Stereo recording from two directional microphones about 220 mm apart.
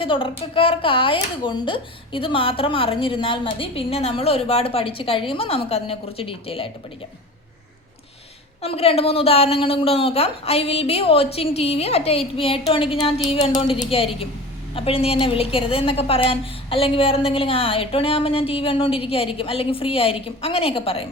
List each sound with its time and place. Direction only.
0.0 s speech: 25° left (ahead or behind)
8.6 s speech: 25° left (ahead or behind)